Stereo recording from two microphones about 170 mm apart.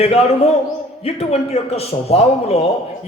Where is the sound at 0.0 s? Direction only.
35° left (ahead or behind).